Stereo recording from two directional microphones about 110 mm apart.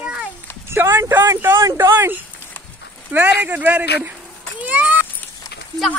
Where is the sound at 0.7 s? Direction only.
25° right (ahead or behind).